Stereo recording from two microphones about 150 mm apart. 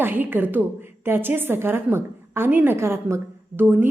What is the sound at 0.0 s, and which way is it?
A woman's voice, 15° right (ahead or behind).